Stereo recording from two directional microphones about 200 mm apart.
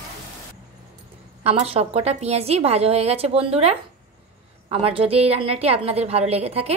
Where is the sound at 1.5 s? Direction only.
30° right (ahead or behind).